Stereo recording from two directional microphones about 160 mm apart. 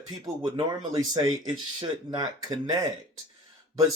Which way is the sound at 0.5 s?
25° right (ahead or behind).